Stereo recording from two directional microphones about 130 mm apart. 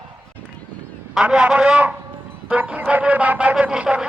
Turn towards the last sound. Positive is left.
turn(degrees=-5)  # may be behind; listen again after turning